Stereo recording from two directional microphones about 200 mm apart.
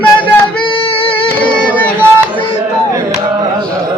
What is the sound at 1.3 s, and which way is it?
Music, 5° left (ahead or behind).